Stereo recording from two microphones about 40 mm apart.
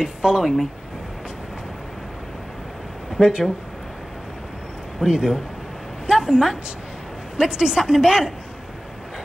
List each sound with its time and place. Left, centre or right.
0.0 s a woman's voice: centre
0.4 s a woman's voice: centre
3.2 s speech: centre
5.0 s a woman's voice: centre